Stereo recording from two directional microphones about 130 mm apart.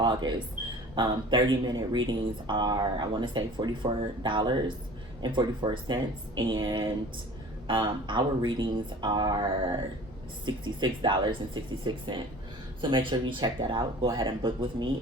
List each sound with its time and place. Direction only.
0.0 s speech: 35° right (ahead or behind)